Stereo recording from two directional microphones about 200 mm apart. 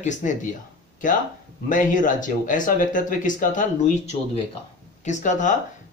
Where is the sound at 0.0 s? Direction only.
40° left (ahead or behind).